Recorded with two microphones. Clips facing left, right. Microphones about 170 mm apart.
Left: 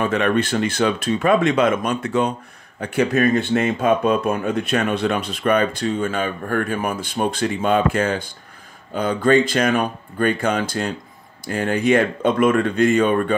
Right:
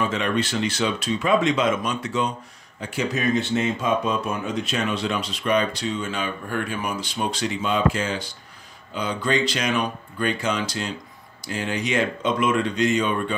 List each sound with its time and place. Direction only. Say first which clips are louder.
0.0 s speech: left 5 dB; 55° left (ahead or behind)